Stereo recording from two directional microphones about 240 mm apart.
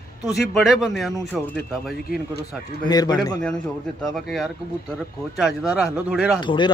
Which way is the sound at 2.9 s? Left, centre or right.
Centre.